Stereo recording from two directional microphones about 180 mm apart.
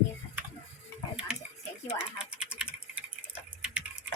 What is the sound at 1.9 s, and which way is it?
Typing, 5° right (ahead or behind).